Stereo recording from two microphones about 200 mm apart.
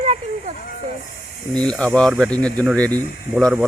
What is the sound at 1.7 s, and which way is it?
A man's voice, 5° left (ahead or behind).